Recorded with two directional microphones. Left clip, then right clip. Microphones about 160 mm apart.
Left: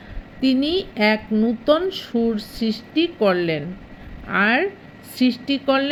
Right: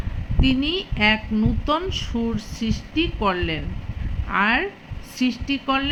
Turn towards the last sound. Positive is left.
turn(degrees=30)  # may be behind; listen again after turning